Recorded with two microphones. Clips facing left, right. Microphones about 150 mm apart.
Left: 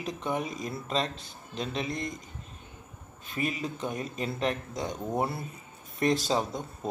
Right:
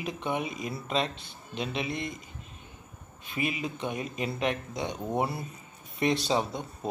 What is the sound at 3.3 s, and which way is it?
Speech, 5° right (ahead or behind).